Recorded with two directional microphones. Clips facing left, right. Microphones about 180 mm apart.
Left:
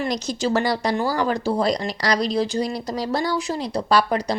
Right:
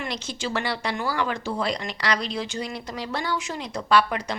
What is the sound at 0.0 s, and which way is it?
Speech, 40° left (ahead or behind).